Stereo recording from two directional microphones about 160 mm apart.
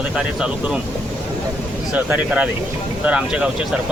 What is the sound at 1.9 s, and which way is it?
Speech, 10° right (ahead or behind).